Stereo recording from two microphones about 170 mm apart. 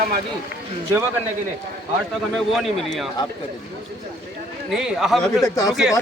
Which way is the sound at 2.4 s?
Centre (ahead or behind).